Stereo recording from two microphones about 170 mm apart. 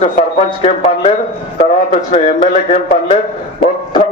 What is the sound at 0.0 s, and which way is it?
A man's voice, 35° left (ahead or behind).